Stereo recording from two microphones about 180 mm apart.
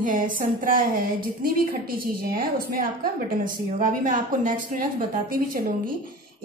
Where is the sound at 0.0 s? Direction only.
50° right (ahead or behind).